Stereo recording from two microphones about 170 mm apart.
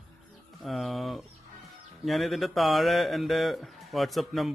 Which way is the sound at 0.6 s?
Centre (ahead or behind).